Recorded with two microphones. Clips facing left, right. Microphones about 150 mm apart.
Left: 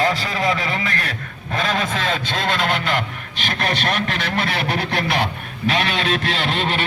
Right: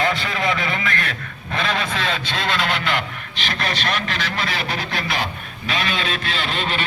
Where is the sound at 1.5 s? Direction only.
45° left (ahead or behind).